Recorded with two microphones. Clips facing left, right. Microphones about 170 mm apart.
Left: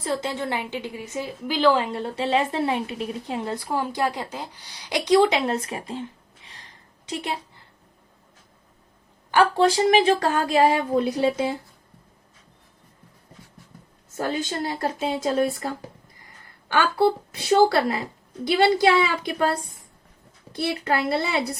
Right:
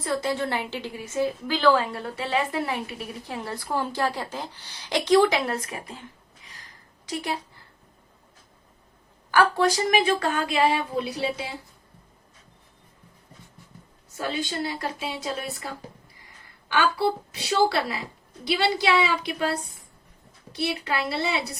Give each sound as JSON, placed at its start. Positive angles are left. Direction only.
{"t": 0.0, "sound": "a woman's voice", "side_deg": 20}
{"t": 9.3, "sound": "a woman's voice", "side_deg": 25}
{"t": 14.2, "sound": "speech", "side_deg": 45}
{"t": 17.5, "sound": "speech", "side_deg": 50}